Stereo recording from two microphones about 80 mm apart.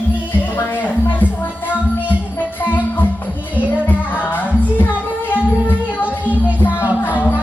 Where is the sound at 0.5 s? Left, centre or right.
Left.